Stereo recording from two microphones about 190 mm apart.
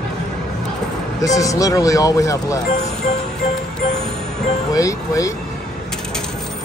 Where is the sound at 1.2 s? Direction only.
15° left (ahead or behind).